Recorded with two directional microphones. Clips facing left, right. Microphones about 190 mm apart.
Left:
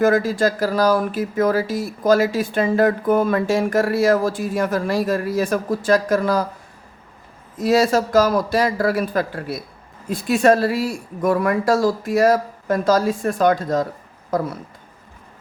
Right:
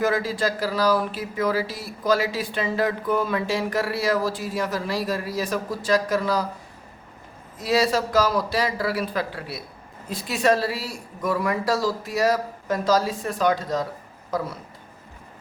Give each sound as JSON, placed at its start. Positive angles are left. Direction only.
{"t": 0.0, "sound": "speech", "side_deg": 50}
{"t": 7.6, "sound": "speech", "side_deg": 45}